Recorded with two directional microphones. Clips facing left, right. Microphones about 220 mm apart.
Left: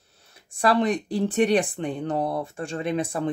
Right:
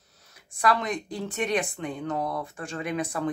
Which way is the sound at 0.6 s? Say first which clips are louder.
Left 5 dB; 30° left (ahead or behind).